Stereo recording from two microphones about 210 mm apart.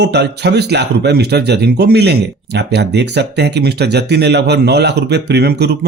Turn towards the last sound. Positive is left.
turn(degrees=-50)  # may be behind; listen again after turning